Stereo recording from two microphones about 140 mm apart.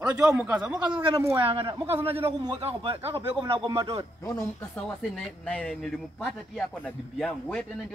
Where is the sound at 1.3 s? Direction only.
40° right (ahead or behind).